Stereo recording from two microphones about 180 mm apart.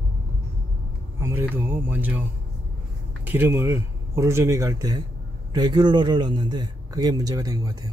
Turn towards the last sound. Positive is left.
turn(degrees=-20)  # may be behind; listen again after turning